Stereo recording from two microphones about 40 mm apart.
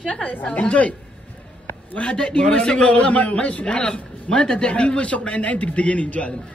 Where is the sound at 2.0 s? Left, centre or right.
Left.